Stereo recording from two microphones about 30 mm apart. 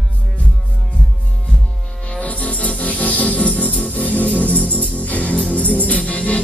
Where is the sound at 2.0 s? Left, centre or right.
Left.